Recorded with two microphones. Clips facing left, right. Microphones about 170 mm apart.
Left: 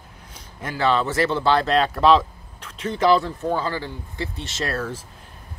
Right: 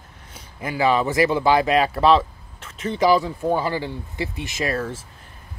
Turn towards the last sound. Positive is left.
turn(degrees=-10)  # may be behind; listen again after turning